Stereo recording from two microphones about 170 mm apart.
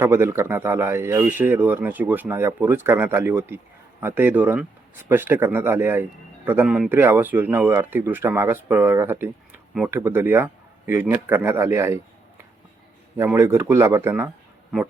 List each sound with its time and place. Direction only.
0.0 s speech: 15° right (ahead or behind)
13.1 s speech: 15° right (ahead or behind)